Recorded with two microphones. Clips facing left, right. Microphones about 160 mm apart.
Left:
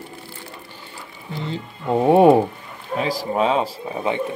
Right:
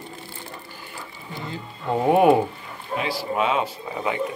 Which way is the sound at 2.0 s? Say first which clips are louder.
Left 4 dB; 30° left (ahead or behind).